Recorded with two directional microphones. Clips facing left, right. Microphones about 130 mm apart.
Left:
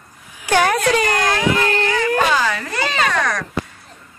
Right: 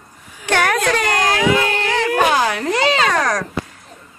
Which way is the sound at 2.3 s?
60° right (ahead or behind).